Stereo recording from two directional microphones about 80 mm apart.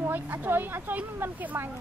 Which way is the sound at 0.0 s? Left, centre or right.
Right.